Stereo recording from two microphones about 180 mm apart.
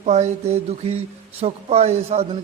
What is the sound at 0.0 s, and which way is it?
A man's voice, 40° right (ahead or behind).